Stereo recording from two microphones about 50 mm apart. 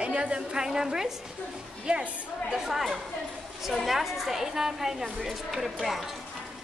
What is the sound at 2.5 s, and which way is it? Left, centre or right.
A woman's voice, centre.